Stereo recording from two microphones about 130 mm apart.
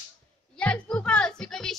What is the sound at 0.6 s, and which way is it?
Music, 10° left (ahead or behind).